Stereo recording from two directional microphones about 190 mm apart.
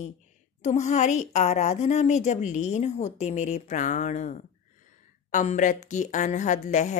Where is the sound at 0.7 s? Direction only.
40° left (ahead or behind).